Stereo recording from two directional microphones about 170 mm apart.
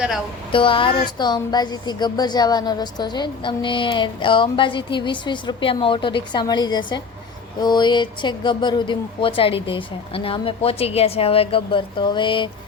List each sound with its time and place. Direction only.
0.5 s speech: 30° left (ahead or behind)